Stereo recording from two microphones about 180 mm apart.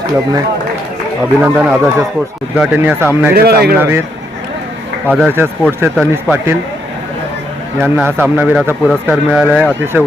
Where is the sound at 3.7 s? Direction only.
10° right (ahead or behind).